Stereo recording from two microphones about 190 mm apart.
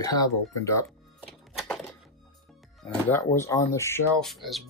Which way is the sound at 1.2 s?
Centre (ahead or behind).